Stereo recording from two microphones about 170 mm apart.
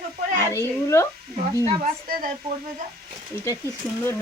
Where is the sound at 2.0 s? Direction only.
55° right (ahead or behind).